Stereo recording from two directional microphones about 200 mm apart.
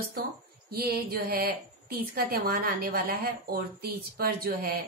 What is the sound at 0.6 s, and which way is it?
A woman's voice, 50° right (ahead or behind).